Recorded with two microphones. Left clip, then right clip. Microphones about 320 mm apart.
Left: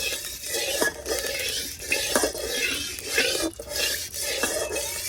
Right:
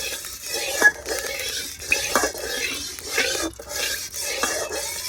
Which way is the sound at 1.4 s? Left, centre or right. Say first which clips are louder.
Right 1 dB; centre.